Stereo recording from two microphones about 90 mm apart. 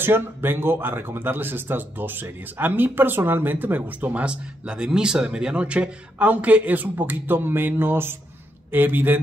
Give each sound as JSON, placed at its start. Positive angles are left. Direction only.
{"t": 0.0, "sound": "speech", "side_deg": -25}